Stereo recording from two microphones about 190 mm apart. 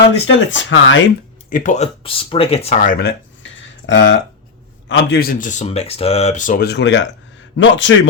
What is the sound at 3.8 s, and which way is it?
Speech, 75° left (ahead or behind).